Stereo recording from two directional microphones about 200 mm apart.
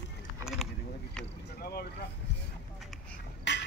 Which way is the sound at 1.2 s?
5° left (ahead or behind).